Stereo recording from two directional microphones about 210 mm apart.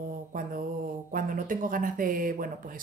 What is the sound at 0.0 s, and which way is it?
Mantra, 40° right (ahead or behind).